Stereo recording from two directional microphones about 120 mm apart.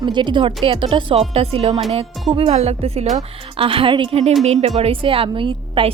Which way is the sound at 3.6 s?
50° right (ahead or behind).